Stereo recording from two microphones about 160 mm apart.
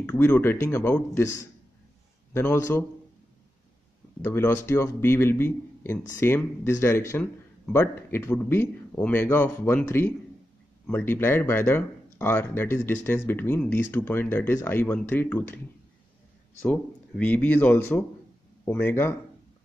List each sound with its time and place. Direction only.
0.0 s speech: 10° left (ahead or behind)
4.2 s speech: 15° left (ahead or behind)
16.6 s speech: 10° left (ahead or behind)